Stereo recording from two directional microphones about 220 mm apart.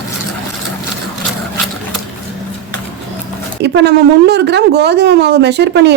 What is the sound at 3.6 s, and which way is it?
Speech, 50° right (ahead or behind).